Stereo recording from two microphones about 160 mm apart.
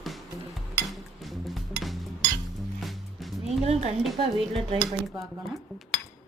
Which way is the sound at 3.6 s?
40° right (ahead or behind).